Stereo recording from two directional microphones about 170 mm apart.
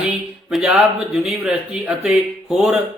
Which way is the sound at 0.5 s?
5° right (ahead or behind).